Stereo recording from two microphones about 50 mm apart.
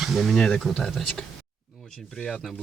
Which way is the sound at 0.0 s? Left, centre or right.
Centre.